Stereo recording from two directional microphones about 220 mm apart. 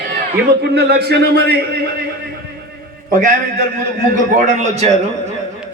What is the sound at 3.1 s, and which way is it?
A man's voice, 35° right (ahead or behind).